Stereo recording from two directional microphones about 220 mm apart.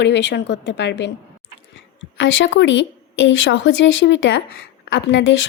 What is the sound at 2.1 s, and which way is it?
A woman's voice, 55° left (ahead or behind).